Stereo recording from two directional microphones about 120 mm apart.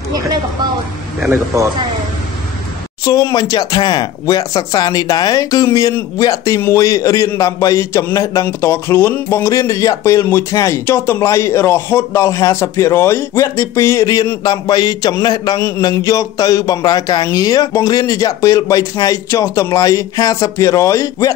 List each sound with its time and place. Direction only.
1.3 s a man's voice: 25° right (ahead or behind)
3.1 s speech: 30° left (ahead or behind)